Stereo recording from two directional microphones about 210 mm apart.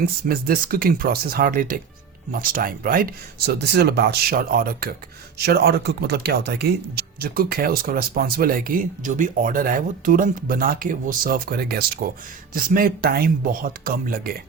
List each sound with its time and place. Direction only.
0.3 s speech: 45° right (ahead or behind)